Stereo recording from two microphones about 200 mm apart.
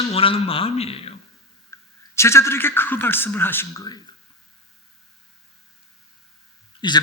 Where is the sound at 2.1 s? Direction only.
15° left (ahead or behind).